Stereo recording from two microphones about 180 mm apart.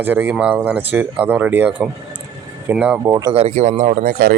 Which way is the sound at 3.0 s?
20° right (ahead or behind).